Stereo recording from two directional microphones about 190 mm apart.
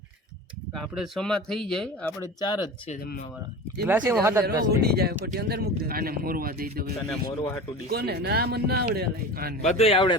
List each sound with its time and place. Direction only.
0.7 s speech: centre (ahead or behind)
2.4 s speech: 20° left (ahead or behind)
3.8 s speech: 10° right (ahead or behind)
4.6 s speech: 55° right (ahead or behind)
9.6 s speech: 35° left (ahead or behind)